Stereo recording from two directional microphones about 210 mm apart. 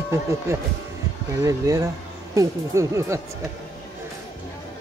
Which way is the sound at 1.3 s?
15° right (ahead or behind).